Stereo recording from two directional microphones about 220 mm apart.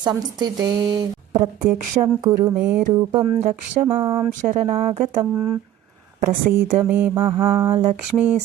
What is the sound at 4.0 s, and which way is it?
Mantra, 20° right (ahead or behind).